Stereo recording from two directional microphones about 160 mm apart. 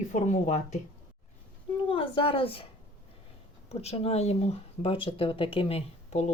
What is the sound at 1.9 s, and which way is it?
Speech, 35° left (ahead or behind).